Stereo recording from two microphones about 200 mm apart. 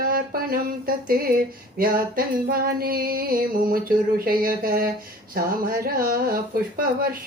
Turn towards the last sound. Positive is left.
turn(degrees=-45)  # may be behind; listen again after turning